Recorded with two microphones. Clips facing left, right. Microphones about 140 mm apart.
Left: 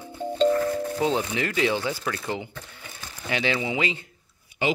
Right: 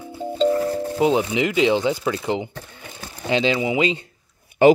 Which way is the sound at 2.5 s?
40° right (ahead or behind).